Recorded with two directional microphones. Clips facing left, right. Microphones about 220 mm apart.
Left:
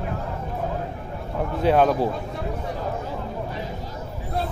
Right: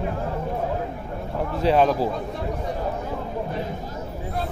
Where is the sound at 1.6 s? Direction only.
Centre (ahead or behind).